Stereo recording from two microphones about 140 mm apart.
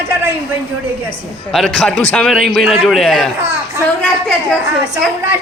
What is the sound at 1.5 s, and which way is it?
A man's voice, centre (ahead or behind).